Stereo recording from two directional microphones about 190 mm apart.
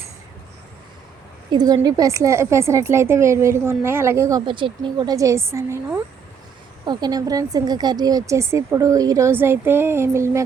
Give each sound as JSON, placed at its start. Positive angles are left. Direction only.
{"t": 1.5, "sound": "a woman's voice", "side_deg": -20}